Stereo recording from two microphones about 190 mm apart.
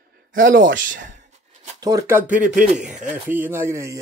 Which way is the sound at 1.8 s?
15° right (ahead or behind).